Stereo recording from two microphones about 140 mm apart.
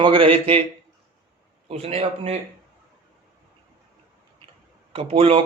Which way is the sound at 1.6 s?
45° right (ahead or behind).